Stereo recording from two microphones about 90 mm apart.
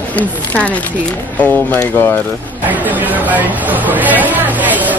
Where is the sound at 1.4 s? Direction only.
15° left (ahead or behind).